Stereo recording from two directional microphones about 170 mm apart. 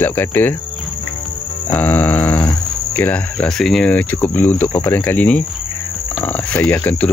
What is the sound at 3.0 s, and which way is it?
Speech, 10° left (ahead or behind).